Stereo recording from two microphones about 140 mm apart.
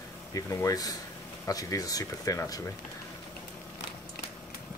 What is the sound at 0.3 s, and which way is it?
Speech, 20° left (ahead or behind).